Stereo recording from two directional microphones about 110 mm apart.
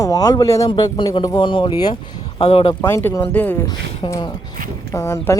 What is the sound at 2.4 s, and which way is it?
Speech, 70° left (ahead or behind).